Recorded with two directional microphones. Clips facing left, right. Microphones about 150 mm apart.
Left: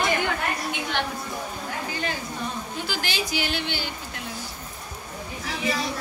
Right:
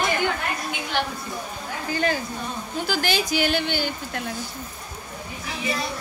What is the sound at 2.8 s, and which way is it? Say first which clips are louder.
A woman's voice: right 7 dB; 45° right (ahead or behind).